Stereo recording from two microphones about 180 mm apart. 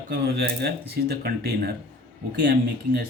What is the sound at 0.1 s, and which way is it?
Speech, 65° right (ahead or behind).